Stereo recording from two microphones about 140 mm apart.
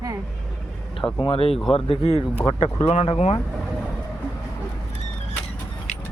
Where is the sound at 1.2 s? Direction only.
40° left (ahead or behind).